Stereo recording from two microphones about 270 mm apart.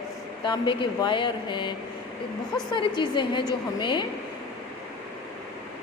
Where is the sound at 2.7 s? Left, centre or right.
Centre.